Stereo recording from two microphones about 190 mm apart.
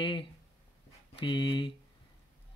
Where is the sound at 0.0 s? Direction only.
25° left (ahead or behind).